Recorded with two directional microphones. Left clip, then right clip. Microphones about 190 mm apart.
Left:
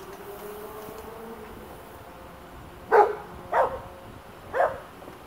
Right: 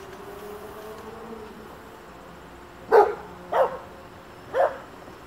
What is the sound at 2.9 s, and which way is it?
Bow-wow, 30° right (ahead or behind).